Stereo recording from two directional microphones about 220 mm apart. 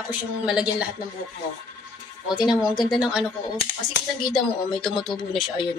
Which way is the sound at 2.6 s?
Centre (ahead or behind).